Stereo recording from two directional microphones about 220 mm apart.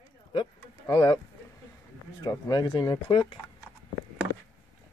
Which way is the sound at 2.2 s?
15° left (ahead or behind).